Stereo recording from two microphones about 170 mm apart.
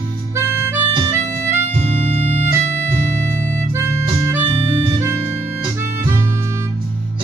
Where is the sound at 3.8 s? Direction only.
15° right (ahead or behind).